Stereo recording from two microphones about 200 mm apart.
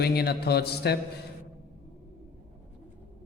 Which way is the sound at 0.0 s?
55° left (ahead or behind).